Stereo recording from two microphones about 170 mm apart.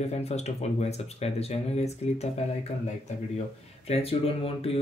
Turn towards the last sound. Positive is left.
turn(degrees=35)  # may be behind; listen again after turning